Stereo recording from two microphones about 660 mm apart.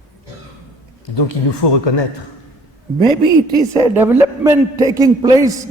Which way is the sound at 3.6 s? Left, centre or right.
Centre.